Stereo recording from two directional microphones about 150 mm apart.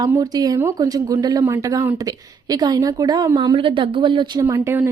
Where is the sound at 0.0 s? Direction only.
25° right (ahead or behind).